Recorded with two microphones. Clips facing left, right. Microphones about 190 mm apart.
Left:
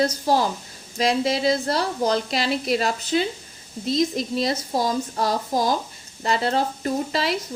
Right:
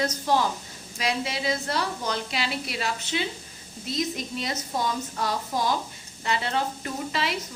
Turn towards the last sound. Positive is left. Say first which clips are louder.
# left 6 dB
turn(degrees=40)  # may be behind; listen again after turning